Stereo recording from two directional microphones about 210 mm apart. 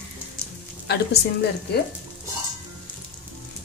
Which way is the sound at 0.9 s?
50° left (ahead or behind).